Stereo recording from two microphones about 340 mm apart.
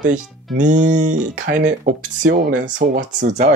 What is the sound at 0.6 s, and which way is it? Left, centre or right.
Speech, right.